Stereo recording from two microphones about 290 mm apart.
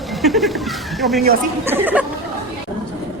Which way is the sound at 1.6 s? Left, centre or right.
Centre.